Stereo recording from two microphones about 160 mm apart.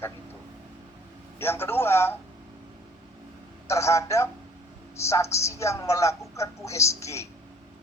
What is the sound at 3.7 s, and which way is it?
Speech, 20° left (ahead or behind).